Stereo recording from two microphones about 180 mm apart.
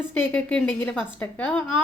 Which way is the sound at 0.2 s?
10° left (ahead or behind).